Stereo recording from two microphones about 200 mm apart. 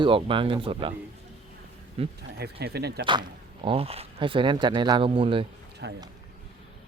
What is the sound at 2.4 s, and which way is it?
Speech, 55° right (ahead or behind).